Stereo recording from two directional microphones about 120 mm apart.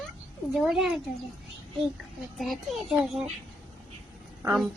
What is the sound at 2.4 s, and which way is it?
Speech, centre (ahead or behind).